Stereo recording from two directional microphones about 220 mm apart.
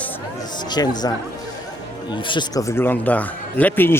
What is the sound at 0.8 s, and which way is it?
Speech, 15° left (ahead or behind).